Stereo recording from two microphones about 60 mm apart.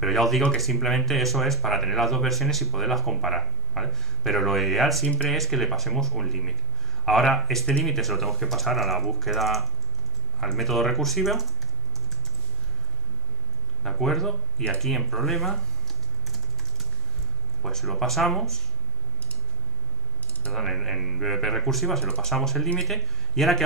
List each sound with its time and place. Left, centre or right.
0.0 s speech: centre
5.0 s speech: left
5.3 s speech: centre
13.8 s speech: centre
17.6 s speech: centre
20.5 s a man's voice: centre